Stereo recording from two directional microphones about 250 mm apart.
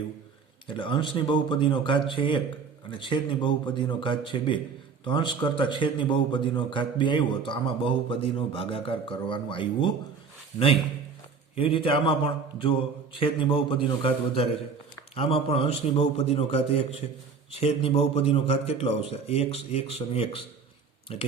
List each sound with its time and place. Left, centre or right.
0.7 s a man's voice: centre
11.5 s a man's voice: left